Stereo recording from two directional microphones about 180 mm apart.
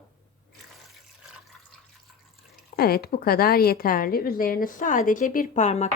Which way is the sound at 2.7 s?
55° left (ahead or behind).